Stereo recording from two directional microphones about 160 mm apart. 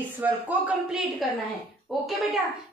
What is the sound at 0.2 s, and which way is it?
Speech, 10° right (ahead or behind).